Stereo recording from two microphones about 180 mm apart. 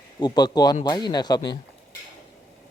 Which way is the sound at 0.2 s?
20° left (ahead or behind).